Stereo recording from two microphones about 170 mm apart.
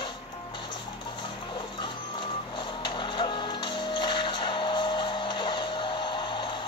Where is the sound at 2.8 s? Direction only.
30° left (ahead or behind).